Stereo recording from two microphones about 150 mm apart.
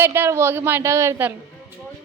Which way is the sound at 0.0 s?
15° right (ahead or behind).